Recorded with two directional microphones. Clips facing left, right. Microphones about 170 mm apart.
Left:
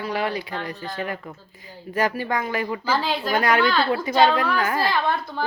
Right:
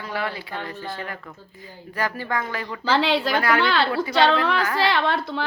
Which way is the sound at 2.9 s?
80° right.